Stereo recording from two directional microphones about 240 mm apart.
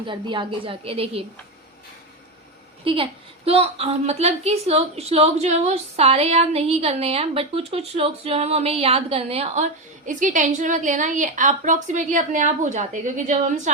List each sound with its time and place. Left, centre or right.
0.0 s a woman's voice: centre
2.8 s a woman's voice: right